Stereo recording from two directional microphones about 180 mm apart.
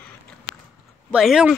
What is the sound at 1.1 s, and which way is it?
Speech, 5° right (ahead or behind).